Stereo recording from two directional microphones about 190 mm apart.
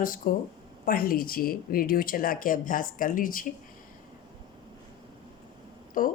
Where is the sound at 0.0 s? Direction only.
45° left (ahead or behind).